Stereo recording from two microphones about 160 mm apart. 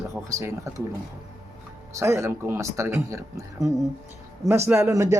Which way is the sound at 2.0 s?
20° right (ahead or behind).